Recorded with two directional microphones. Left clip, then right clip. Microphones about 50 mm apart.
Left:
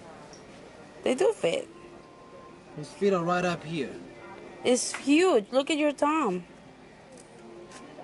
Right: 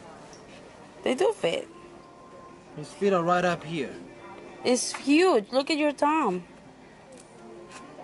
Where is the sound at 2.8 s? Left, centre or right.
Centre.